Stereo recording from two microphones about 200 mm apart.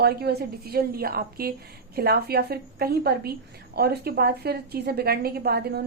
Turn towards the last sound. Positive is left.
turn(degrees=-55)  # may be behind; listen again after turning